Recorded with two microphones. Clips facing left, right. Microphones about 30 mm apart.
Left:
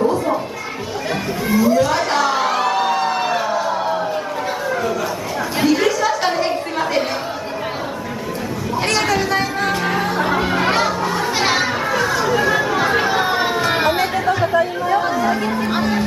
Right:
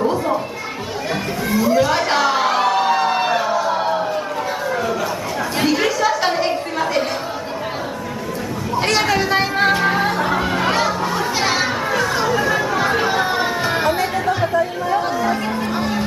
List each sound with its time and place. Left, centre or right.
1.5 s emergency vehicle: centre
3.6 s a sound: centre
5.6 s a sound: centre
8.7 s vehicle: centre
9.7 s music: centre
10.1 s chatter: centre
11.6 s children playing: centre
12.4 s chatter: centre
13.7 s chatter: centre
14.1 s chatter: centre